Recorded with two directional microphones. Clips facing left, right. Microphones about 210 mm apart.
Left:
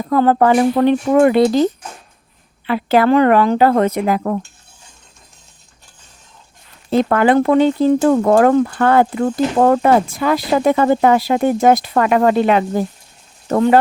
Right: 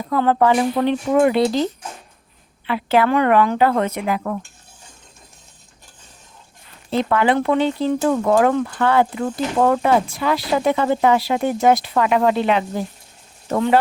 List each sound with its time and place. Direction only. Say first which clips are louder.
0.1 s speech: left 4 dB; 45° left (ahead or behind)
6.9 s speech: left 5 dB; 45° left (ahead or behind)